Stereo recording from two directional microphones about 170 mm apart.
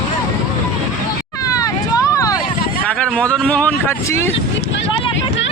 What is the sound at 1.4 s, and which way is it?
Vehicle, 20° left (ahead or behind).